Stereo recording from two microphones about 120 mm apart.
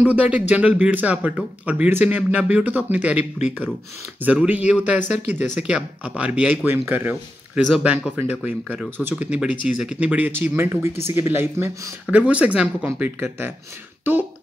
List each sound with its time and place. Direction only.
0.0 s speech: 10° right (ahead or behind)
4.2 s speech: 10° right (ahead or behind)